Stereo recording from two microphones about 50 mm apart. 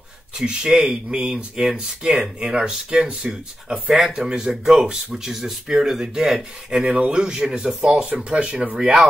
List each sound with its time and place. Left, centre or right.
0.4 s speech: centre
3.9 s speech: centre